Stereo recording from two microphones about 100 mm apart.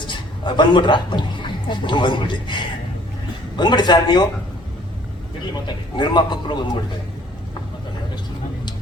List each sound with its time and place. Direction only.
0.1 s a man's voice: 50° left (ahead or behind)
3.6 s a man's voice: 50° left (ahead or behind)
5.6 s a man's voice: 50° left (ahead or behind)